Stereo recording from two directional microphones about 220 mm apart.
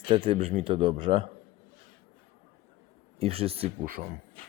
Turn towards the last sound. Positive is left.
turn(degrees=-40)  # may be behind; listen again after turning